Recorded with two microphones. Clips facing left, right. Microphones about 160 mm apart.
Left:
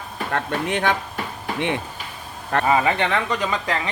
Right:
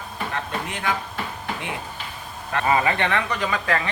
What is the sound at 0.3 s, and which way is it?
Speech, 65° left (ahead or behind).